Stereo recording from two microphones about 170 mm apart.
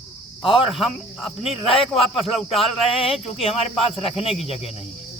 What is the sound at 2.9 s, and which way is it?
Speech, 35° left (ahead or behind).